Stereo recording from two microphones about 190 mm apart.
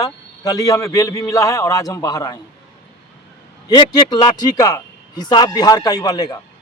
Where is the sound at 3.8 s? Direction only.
20° left (ahead or behind).